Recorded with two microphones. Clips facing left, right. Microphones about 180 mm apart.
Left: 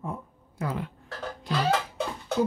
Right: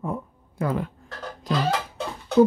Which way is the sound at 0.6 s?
55° right (ahead or behind).